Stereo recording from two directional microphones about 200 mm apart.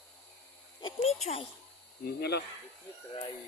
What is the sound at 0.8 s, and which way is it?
Speech, 30° left (ahead or behind).